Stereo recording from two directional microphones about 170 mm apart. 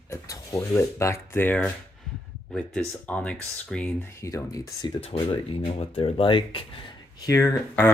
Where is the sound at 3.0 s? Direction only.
10° left (ahead or behind).